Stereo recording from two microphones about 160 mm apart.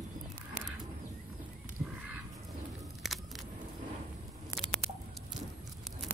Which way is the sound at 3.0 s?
Centre (ahead or behind).